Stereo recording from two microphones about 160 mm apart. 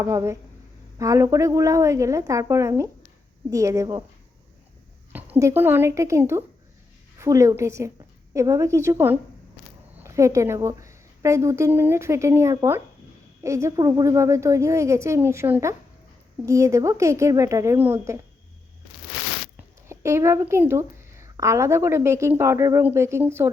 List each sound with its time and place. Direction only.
0.0 s a woman's voice: 20° right (ahead or behind)
5.1 s a woman's voice: 15° right (ahead or behind)
19.5 s speech: 15° right (ahead or behind)